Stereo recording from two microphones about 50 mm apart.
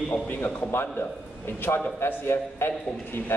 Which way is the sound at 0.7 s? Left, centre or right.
Left.